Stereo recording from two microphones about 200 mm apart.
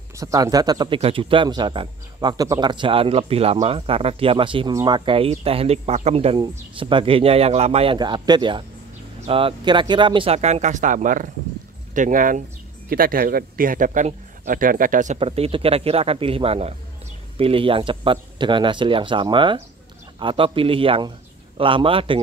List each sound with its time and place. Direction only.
0.1 s a man's voice: 15° right (ahead or behind); by 15.1 s 40° right (ahead or behind)
15.1 s speech: 30° right (ahead or behind)